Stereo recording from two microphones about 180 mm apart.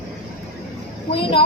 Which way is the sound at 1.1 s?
30° left (ahead or behind).